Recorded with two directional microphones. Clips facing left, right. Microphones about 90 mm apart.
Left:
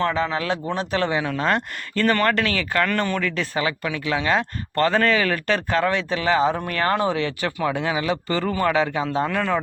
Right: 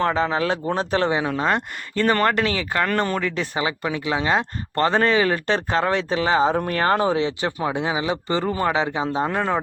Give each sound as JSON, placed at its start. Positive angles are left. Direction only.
{"t": 0.0, "sound": "speech", "side_deg": -35}